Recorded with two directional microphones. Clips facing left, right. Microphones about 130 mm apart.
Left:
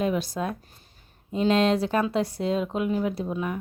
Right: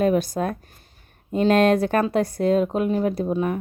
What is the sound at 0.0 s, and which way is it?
Speech, 50° right (ahead or behind).